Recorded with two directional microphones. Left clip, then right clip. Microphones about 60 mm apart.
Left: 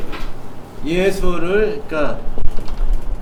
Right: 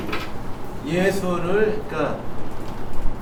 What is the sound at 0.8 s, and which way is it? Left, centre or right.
Speech, left.